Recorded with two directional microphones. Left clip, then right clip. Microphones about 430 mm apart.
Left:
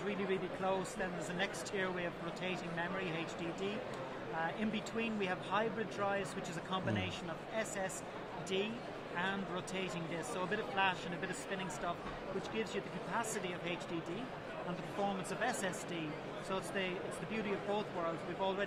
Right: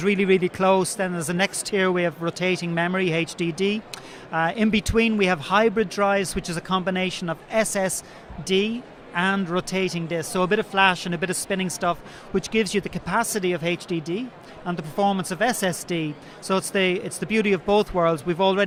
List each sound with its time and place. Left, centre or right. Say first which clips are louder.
0.0 s speech: right 18 dB; right
15.0 s speech: right 16 dB; right